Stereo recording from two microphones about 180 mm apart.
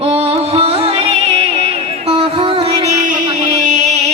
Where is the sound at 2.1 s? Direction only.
30° right (ahead or behind).